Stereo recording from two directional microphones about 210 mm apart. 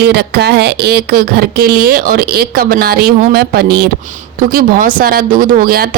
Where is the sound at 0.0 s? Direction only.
50° right (ahead or behind).